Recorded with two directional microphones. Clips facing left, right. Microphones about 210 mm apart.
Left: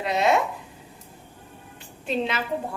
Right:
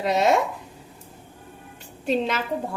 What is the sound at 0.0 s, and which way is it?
Speech, 40° right (ahead or behind).